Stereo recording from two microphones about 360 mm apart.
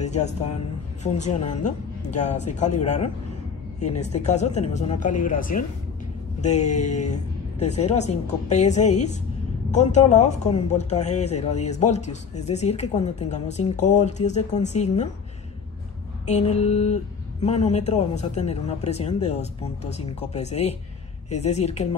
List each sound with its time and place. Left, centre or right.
0.0 s a woman's voice: centre
16.3 s a woman's voice: centre